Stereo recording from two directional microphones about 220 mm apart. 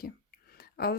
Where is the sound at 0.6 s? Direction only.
45° left (ahead or behind).